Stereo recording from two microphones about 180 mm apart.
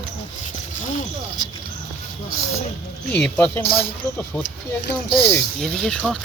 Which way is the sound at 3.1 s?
10° left (ahead or behind).